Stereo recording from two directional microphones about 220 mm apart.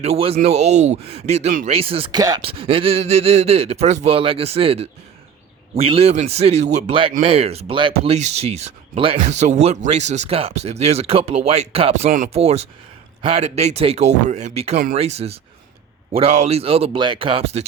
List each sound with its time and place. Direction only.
0.0 s speech: 25° right (ahead or behind)